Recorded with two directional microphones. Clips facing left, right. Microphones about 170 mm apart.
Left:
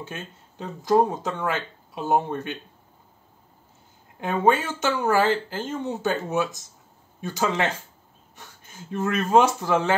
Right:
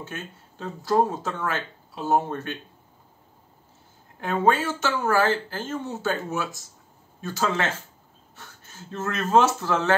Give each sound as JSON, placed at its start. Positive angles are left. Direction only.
{"t": 0.0, "sound": "speech", "side_deg": 15}
{"t": 4.2, "sound": "speech", "side_deg": 20}